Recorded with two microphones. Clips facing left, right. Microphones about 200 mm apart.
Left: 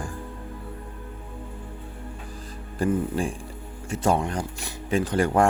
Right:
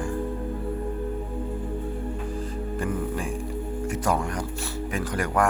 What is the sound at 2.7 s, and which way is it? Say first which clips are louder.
Music: left 5 dB; 30° left (ahead or behind).